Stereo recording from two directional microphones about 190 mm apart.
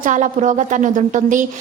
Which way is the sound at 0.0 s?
40° right (ahead or behind).